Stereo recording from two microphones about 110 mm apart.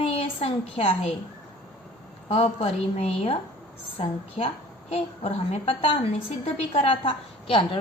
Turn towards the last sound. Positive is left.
turn(degrees=50)  # may be behind; listen again after turning